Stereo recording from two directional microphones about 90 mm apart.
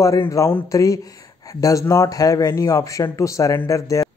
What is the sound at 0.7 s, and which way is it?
Speech, 40° left (ahead or behind).